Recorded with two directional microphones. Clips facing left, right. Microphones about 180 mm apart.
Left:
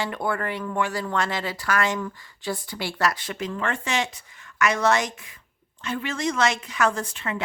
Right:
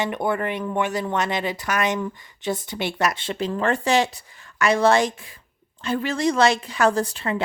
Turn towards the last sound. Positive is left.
turn(degrees=-35)  # may be behind; listen again after turning